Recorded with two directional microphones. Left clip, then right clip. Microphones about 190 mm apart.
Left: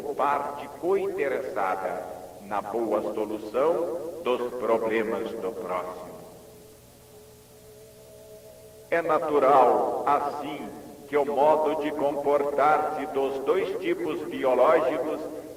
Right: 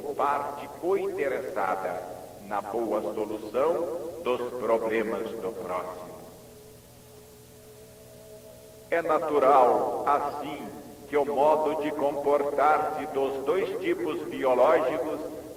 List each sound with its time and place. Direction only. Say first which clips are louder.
0.2 s a man's voice: left 1 dB; 35° right (ahead or behind)
8.9 s a man's voice: left 1 dB; 35° right (ahead or behind)